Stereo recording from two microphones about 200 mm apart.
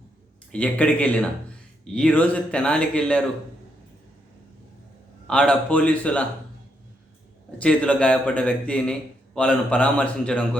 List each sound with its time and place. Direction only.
0.5 s a man's voice: 5° left (ahead or behind)
5.3 s a man's voice: 5° left (ahead or behind)
7.6 s a man's voice: 5° left (ahead or behind)